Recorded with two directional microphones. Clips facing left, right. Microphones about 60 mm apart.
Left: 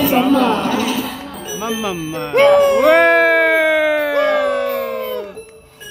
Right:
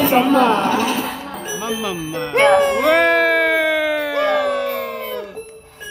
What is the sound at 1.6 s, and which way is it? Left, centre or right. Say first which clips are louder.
Speech: left 3 dB; left.